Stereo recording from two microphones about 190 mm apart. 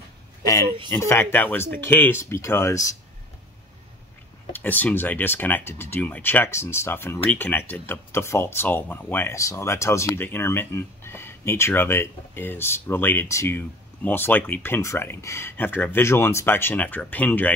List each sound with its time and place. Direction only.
0.4 s a sound: 15° left (ahead or behind)
0.8 s speech: 10° left (ahead or behind)
4.5 s speech: 10° left (ahead or behind)